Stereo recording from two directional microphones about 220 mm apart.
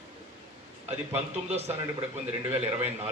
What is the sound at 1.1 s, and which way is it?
Speech, 30° right (ahead or behind).